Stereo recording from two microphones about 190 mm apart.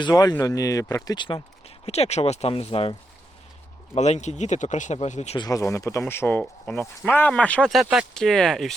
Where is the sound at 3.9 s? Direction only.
35° left (ahead or behind).